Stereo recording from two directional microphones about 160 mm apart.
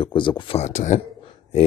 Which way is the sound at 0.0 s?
30° left (ahead or behind).